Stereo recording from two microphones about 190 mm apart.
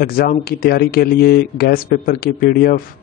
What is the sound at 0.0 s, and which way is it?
Speech, 50° left (ahead or behind).